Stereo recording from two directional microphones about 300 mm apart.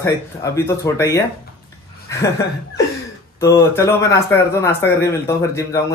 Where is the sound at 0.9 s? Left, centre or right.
Centre.